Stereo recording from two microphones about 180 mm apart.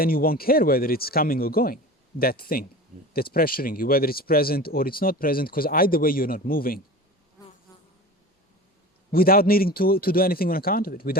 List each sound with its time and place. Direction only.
0.0 s speech: 55° left (ahead or behind)
9.1 s speech: 55° left (ahead or behind)